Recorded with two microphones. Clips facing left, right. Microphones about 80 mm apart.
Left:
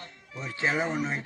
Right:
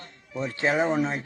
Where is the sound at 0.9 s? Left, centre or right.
Right.